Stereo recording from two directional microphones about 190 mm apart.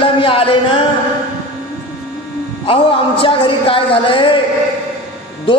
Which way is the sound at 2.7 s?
30° left (ahead or behind).